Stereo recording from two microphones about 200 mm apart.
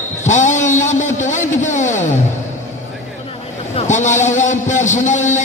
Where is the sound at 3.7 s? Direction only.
35° left (ahead or behind).